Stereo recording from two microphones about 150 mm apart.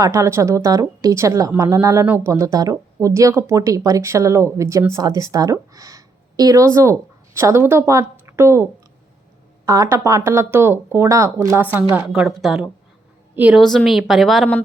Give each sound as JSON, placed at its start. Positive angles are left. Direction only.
{"t": 0.0, "sound": "a woman's voice", "side_deg": -20}
{"t": 9.6, "sound": "a woman's voice", "side_deg": -20}
{"t": 13.6, "sound": "speech", "side_deg": 5}